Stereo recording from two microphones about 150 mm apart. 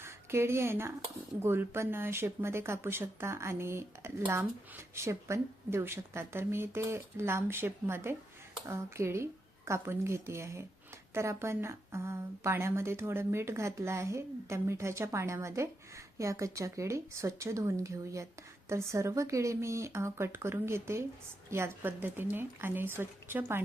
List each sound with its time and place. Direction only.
0.0 s a woman's voice: 15° right (ahead or behind)